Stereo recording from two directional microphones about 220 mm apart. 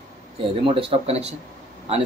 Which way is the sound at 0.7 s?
25° right (ahead or behind).